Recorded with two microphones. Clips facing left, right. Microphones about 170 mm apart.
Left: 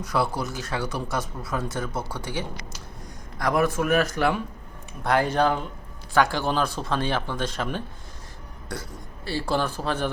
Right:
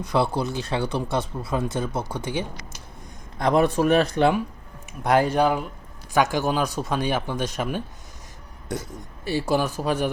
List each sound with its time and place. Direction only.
0.0 s speech: 25° right (ahead or behind)
5.0 s speech: 15° right (ahead or behind)
9.2 s speech: 15° right (ahead or behind)